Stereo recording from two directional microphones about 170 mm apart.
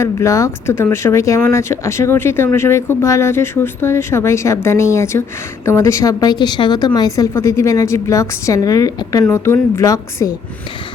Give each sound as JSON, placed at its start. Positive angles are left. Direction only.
{"t": 0.0, "sound": "speech", "side_deg": 15}